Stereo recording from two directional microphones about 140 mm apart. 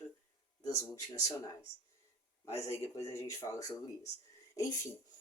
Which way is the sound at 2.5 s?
20° left (ahead or behind).